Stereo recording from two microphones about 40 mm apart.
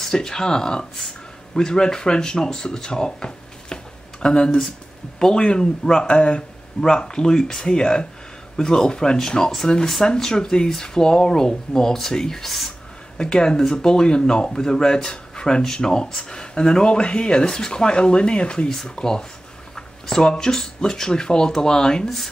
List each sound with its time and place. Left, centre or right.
0.0 s speech: centre
13.2 s speech: centre